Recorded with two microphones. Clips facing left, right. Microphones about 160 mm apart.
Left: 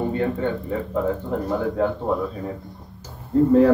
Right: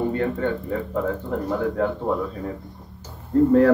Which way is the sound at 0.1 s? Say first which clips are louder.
Even; 15° left (ahead or behind).